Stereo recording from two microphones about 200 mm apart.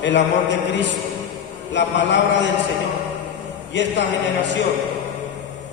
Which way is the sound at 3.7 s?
65° left (ahead or behind).